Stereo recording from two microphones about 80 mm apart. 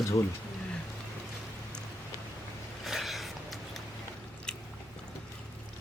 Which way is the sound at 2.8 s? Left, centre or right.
Centre.